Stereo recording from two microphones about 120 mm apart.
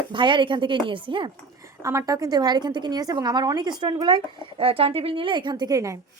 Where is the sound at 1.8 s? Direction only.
25° right (ahead or behind).